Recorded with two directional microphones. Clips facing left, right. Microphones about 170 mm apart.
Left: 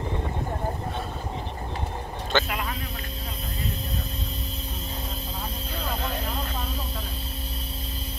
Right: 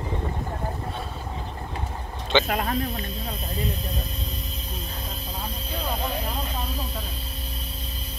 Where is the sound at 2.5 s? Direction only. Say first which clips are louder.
Right 6 dB; 45° right (ahead or behind).